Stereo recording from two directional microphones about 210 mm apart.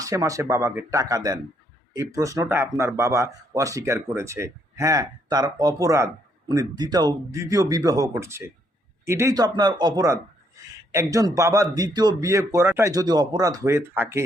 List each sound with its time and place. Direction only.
0.0 s speech: 15° right (ahead or behind)